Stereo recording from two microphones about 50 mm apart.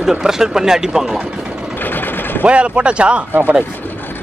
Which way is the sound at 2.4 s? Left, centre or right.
Right.